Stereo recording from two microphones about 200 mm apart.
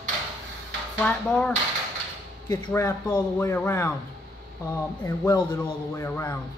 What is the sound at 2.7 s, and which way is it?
Speech, 10° left (ahead or behind).